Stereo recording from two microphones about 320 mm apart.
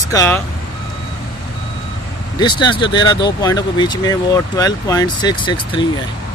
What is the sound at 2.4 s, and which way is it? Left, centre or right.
Speech, centre.